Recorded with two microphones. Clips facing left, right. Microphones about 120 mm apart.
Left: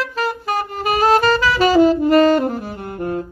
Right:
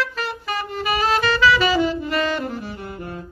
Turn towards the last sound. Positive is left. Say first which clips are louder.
# left 8 dB
turn(degrees=55)  # may be behind; listen again after turning